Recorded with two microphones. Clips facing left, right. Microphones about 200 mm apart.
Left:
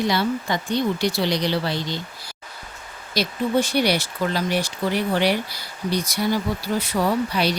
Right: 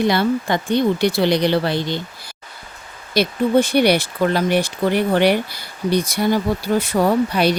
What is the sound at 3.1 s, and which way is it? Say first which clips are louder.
Speech: right 6 dB; 55° right (ahead or behind).